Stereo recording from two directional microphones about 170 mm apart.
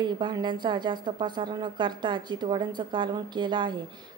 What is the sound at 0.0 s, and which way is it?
A woman's voice, 25° right (ahead or behind).